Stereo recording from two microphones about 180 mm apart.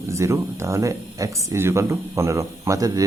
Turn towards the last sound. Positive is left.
turn(degrees=-20)  # may be behind; listen again after turning